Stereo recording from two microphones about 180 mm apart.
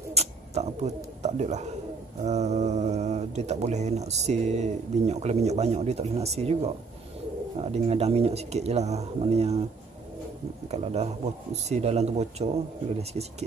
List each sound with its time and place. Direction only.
0.1 s speech: 35° right (ahead or behind)
10.7 s speech: 35° right (ahead or behind)